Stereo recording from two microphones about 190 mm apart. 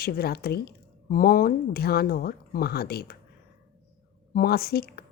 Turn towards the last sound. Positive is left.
turn(degrees=55)  # may be behind; listen again after turning